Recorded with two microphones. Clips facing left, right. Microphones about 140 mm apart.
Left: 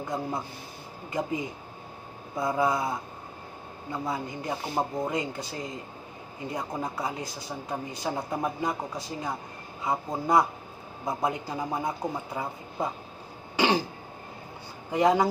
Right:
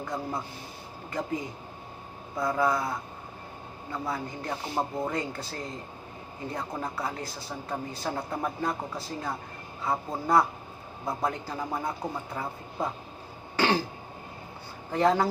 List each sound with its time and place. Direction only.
0.0 s a man's voice: 20° left (ahead or behind)
13.6 s throat clearing: 15° left (ahead or behind)
14.9 s speech: 15° left (ahead or behind)